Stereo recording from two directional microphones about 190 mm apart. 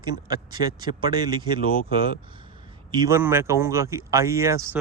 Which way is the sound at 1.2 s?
25° right (ahead or behind).